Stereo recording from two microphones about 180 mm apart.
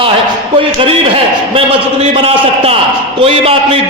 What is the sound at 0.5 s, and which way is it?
A man's voice, 30° right (ahead or behind).